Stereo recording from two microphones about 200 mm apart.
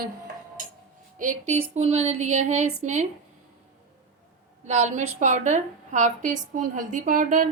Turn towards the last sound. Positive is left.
turn(degrees=-40)  # may be behind; listen again after turning